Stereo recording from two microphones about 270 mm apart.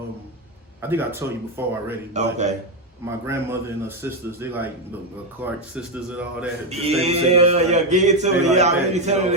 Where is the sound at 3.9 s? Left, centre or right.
Centre.